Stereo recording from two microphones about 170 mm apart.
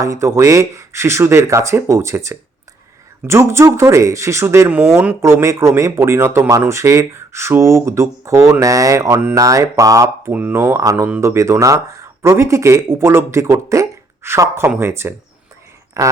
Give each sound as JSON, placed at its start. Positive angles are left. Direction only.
{"t": 0.0, "sound": "speech", "side_deg": -15}